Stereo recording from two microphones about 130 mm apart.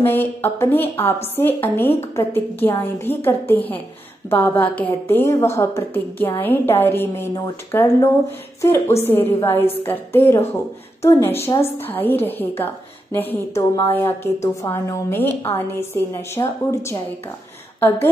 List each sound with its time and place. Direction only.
0.0 s a woman's voice: 15° left (ahead or behind)